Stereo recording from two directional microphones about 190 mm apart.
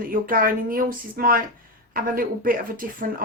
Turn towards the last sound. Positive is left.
turn(degrees=-45)  # may be behind; listen again after turning